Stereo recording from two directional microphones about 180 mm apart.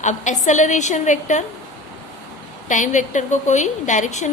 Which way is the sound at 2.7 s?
45° left (ahead or behind).